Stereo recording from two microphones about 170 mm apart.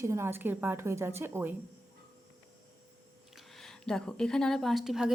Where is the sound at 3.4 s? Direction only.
Centre (ahead or behind).